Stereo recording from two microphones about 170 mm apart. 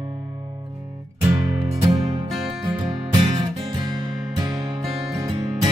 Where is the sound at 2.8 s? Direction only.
30° right (ahead or behind).